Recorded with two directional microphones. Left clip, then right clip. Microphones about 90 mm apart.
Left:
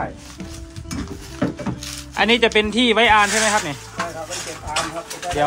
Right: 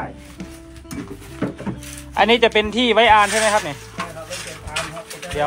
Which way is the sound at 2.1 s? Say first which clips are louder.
Right 2 dB; 5° left (ahead or behind).